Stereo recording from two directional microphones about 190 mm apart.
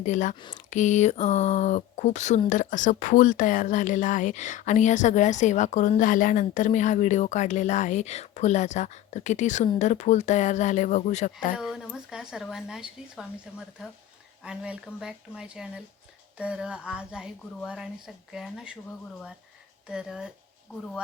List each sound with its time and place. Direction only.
0.0 s speech: 40° left (ahead or behind)
0.3 s speech: 25° left (ahead or behind)
0.7 s speech: 40° left (ahead or behind)
11.5 s a woman's voice: 5° right (ahead or behind)
19.9 s a woman's voice: 5° right (ahead or behind)